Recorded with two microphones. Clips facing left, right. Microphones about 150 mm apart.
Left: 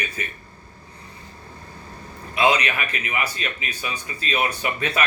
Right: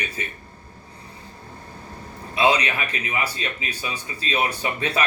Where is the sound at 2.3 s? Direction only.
30° right (ahead or behind).